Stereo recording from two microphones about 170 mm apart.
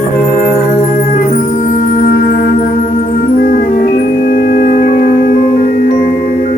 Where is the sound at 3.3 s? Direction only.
60° left (ahead or behind).